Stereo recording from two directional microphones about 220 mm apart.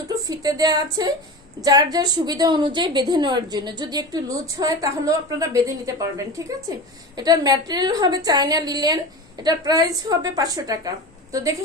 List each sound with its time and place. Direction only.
0.1 s a woman's voice: 15° right (ahead or behind)